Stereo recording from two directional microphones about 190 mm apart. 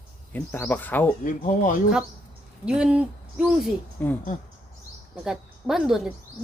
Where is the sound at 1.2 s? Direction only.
45° left (ahead or behind).